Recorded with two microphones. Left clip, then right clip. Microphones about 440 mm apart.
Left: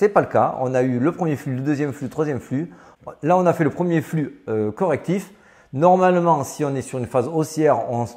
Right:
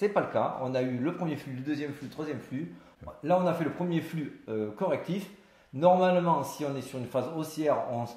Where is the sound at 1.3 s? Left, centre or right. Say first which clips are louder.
Left 11 dB; left.